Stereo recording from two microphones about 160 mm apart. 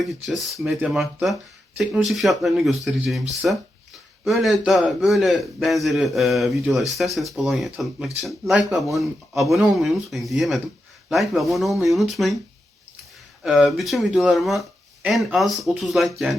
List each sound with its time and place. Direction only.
0.0 s a man's voice: centre (ahead or behind)
13.4 s a man's voice: centre (ahead or behind)